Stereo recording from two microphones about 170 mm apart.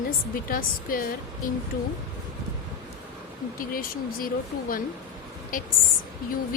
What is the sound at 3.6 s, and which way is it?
Speech, 55° left (ahead or behind).